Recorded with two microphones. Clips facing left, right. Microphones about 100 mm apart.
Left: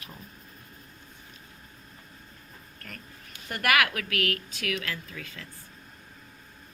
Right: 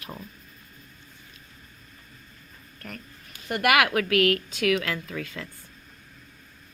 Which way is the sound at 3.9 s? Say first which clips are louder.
Right 9 dB; 45° right (ahead or behind).